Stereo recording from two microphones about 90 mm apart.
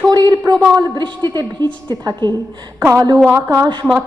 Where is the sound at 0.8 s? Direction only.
60° right (ahead or behind).